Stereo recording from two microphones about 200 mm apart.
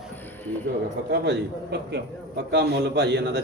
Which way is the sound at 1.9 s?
55° right (ahead or behind).